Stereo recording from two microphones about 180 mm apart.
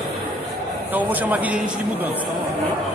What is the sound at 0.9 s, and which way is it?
Speech, 10° right (ahead or behind).